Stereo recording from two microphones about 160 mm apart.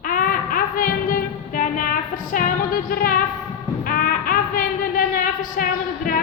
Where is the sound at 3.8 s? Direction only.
65° left (ahead or behind).